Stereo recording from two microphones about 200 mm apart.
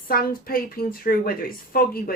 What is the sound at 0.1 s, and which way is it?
Speech, 45° left (ahead or behind).